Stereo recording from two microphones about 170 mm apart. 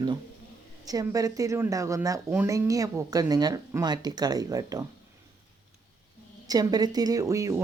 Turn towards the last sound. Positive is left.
turn(degrees=-20)  # may be behind; listen again after turning